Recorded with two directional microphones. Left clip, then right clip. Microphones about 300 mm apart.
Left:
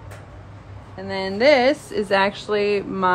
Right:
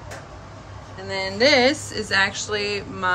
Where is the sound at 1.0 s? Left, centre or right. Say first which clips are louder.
Even; centre.